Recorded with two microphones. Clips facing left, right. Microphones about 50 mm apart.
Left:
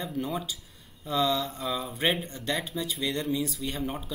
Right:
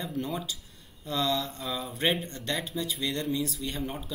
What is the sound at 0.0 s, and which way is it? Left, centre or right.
Speech, centre.